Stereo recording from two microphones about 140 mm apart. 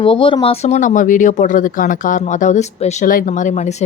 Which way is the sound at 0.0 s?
40° left (ahead or behind).